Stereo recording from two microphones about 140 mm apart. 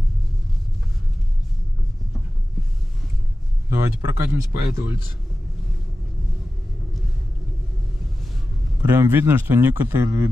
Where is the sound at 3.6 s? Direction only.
20° right (ahead or behind).